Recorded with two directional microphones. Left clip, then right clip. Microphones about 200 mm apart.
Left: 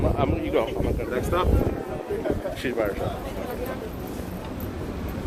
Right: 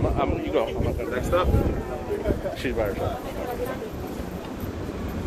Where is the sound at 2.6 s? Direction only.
15° left (ahead or behind).